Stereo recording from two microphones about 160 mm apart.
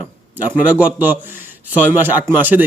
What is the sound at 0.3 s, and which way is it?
A man's voice, 10° right (ahead or behind).